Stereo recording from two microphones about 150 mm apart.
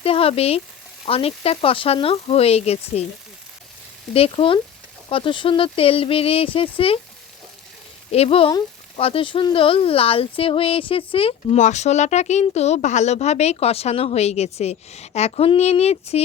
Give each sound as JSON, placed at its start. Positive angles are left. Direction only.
{"t": 0.0, "sound": "speech", "side_deg": 40}
{"t": 4.1, "sound": "speech", "side_deg": 40}
{"t": 8.1, "sound": "speech", "side_deg": 40}
{"t": 11.6, "sound": "speech", "side_deg": 50}